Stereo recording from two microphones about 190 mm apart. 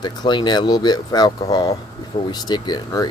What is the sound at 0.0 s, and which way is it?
Speech, 25° left (ahead or behind).